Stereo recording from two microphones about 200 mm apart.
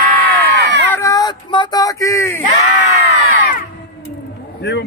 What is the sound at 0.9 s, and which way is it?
Speech, 15° left (ahead or behind).